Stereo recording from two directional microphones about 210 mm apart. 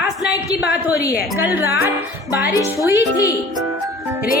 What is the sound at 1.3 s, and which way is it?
Speech, 10° right (ahead or behind).